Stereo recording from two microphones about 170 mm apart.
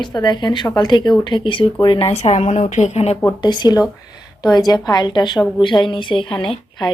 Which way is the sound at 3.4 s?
25° left (ahead or behind).